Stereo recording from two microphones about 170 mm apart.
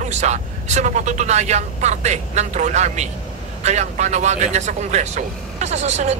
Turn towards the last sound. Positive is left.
turn(degrees=-40)  # may be behind; listen again after turning